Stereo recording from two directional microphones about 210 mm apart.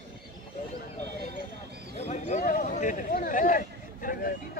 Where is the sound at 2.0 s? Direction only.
35° left (ahead or behind).